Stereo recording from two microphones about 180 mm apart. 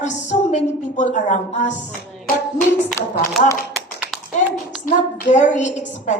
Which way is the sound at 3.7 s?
5° right (ahead or behind).